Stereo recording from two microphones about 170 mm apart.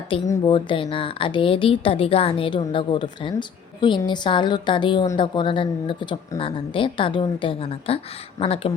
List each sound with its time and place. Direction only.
0.3 s a woman's voice: 25° left (ahead or behind)